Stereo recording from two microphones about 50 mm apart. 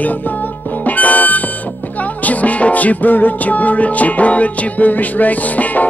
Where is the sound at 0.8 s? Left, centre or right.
Left.